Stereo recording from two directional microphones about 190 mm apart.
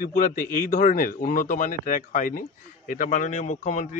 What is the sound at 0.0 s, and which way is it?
A man's voice, 50° left (ahead or behind).